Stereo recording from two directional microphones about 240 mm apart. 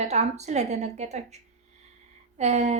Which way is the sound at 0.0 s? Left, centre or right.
Right.